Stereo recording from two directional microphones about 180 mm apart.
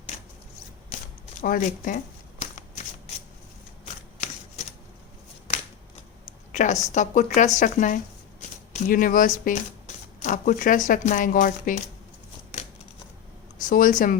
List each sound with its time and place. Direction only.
1.4 s speech: 45° left (ahead or behind)
2.4 s shuffling cards: 40° left (ahead or behind)
6.5 s a sound: 40° left (ahead or behind)
6.9 s speech: 45° left (ahead or behind)
13.6 s speech: 45° left (ahead or behind)